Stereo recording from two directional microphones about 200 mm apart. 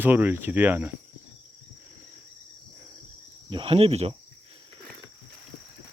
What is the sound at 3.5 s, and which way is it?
Cricket, 25° right (ahead or behind).